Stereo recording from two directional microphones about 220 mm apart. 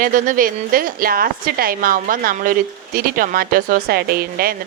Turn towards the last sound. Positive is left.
turn(degrees=-40)  # may be behind; listen again after turning